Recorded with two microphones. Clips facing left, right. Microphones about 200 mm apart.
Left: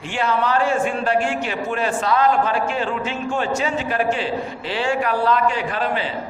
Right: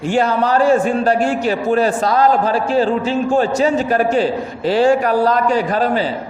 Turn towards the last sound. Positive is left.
turn(degrees=-40)  # may be behind; listen again after turning